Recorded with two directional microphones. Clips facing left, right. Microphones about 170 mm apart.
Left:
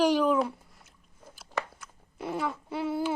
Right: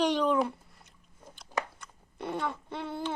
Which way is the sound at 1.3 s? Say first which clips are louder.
Even; 5° left (ahead or behind).